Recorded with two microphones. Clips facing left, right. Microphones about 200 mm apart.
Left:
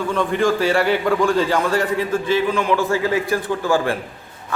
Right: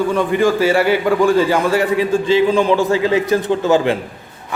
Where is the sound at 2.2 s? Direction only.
25° right (ahead or behind).